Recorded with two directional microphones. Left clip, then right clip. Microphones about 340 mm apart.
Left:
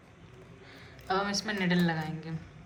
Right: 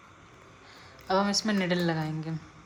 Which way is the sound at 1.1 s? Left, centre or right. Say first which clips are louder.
Right 4 dB; centre.